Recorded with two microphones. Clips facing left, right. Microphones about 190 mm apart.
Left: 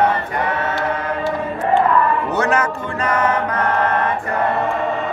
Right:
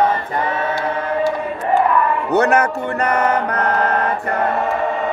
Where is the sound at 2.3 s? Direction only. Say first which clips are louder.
Right 4 dB; 60° right (ahead or behind).